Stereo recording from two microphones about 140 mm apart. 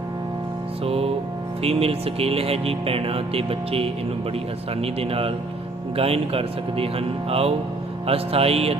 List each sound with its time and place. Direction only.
0.9 s speech: 45° right (ahead or behind)